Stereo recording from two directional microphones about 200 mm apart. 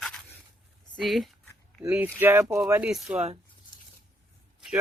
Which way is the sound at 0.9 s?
Centre (ahead or behind).